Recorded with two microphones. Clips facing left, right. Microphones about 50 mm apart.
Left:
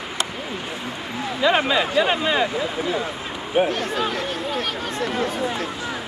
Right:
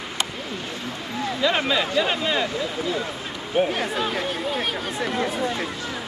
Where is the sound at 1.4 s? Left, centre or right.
Left.